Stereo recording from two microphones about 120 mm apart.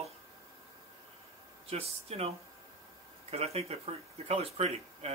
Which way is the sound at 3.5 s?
55° right (ahead or behind).